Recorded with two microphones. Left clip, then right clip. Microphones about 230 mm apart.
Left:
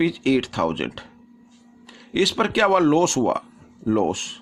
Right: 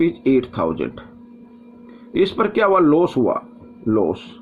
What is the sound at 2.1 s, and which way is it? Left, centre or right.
Speech, left.